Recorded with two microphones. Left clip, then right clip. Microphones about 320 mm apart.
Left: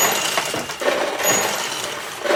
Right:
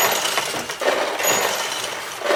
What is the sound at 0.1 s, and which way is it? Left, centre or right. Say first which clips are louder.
Coin: even; centre.